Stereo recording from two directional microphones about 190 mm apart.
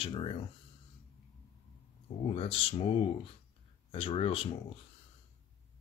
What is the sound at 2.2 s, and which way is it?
Speech, 30° left (ahead or behind).